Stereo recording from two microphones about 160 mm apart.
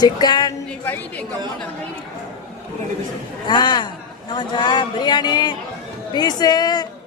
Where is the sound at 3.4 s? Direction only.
25° left (ahead or behind).